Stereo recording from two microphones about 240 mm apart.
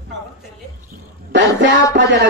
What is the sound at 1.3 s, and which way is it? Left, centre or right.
Speech, right.